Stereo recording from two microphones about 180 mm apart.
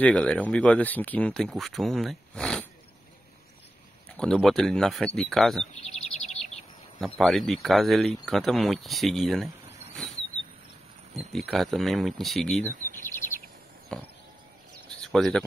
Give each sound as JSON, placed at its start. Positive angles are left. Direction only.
{"t": 0.0, "sound": "speech", "side_deg": 5}
{"t": 4.2, "sound": "speech", "side_deg": 0}
{"t": 5.9, "sound": "chirp", "side_deg": 40}
{"t": 7.0, "sound": "speech", "side_deg": 0}
{"t": 11.1, "sound": "speech", "side_deg": 0}
{"t": 13.9, "sound": "speech", "side_deg": 5}
{"t": 15.0, "sound": "a sound", "side_deg": 0}